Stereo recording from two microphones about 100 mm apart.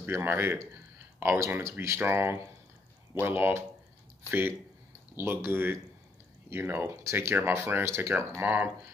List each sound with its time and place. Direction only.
0.0 s speech: 20° right (ahead or behind)